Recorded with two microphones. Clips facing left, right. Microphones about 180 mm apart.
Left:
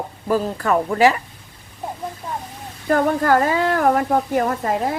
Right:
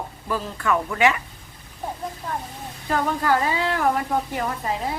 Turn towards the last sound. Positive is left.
turn(degrees=50)  # may be behind; listen again after turning